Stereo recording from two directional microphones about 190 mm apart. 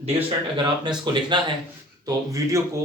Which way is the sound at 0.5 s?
25° right (ahead or behind).